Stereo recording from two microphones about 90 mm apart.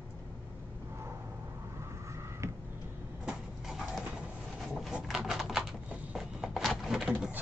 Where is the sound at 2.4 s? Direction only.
35° right (ahead or behind).